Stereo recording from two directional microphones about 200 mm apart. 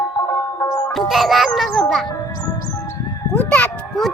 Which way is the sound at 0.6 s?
15° left (ahead or behind).